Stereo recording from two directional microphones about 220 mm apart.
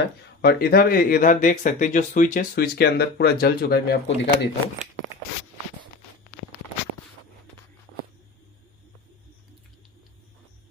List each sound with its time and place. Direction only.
0.4 s speech: 45° left (ahead or behind)